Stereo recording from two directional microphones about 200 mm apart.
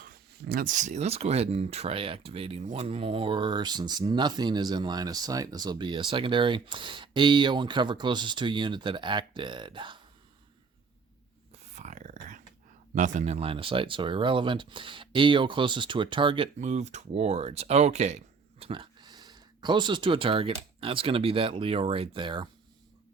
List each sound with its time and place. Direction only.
0.0 s speech: 50° right (ahead or behind); by 10.0 s 25° right (ahead or behind)
11.7 s a sound: 35° right (ahead or behind)
12.9 s speech: 40° right (ahead or behind)